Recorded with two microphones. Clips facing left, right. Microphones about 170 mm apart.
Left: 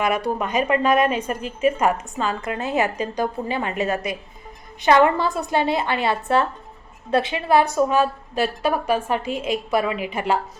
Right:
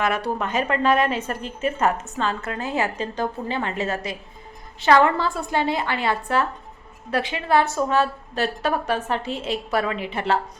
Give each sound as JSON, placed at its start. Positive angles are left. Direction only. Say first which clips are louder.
{"t": 0.3, "sound": "a woman's voice", "louder": "left 3 dB", "side_deg": 15}